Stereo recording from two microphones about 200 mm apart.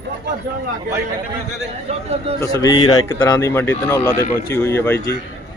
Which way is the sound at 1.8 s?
30° right (ahead or behind).